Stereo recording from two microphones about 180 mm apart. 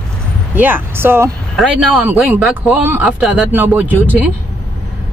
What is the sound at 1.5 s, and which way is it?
Speech, centre (ahead or behind).